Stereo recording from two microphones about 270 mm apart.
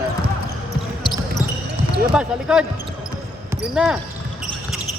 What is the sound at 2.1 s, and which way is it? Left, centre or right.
Speech, centre.